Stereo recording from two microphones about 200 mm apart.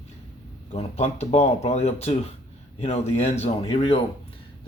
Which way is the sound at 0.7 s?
30° left (ahead or behind).